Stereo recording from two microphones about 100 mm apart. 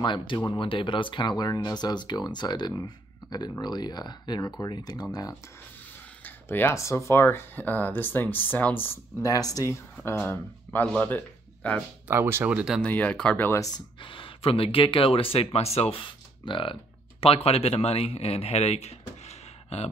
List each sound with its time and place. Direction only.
0.0 s speech: 50° left (ahead or behind)
0.6 s speech: 60° left (ahead or behind)
6.2 s a sound: 20° left (ahead or behind)
6.7 s speech: 30° left (ahead or behind)
9.2 s speech: 35° left (ahead or behind)
10.2 s speech: 25° left (ahead or behind)
12.1 s speech: 25° right (ahead or behind)
12.4 s speech: 10° right (ahead or behind)
12.8 s speech: 15° left (ahead or behind)
13.5 s speech: 35° left (ahead or behind)
14.0 s speech: 60° left (ahead or behind)
17.2 s speech: 80° left